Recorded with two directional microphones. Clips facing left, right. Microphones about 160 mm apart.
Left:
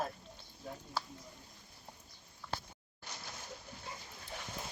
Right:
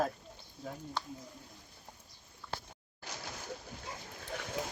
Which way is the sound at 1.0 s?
5° left (ahead or behind).